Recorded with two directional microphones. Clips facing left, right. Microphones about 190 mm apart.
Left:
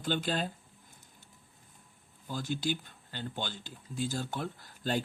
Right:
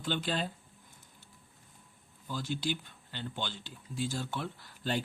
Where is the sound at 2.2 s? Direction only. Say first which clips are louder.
Left 1 dB; 45° left (ahead or behind).